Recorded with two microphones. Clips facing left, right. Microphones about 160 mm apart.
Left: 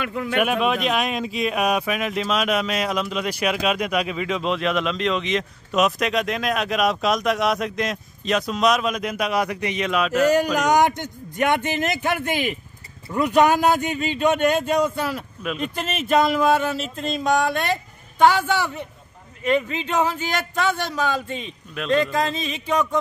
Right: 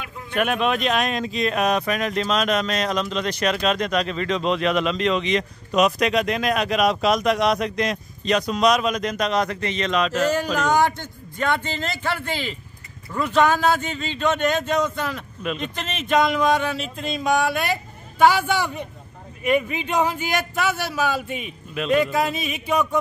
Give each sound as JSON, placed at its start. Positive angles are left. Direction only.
{"t": 0.0, "sound": "speech", "side_deg": 75}
{"t": 0.4, "sound": "a man's voice", "side_deg": 5}